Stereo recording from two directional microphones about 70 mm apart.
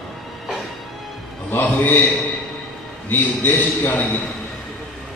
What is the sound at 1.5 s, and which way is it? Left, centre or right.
Speech, left.